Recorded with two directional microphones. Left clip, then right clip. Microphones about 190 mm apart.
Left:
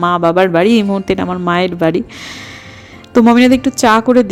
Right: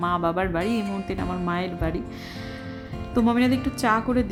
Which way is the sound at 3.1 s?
45° left (ahead or behind).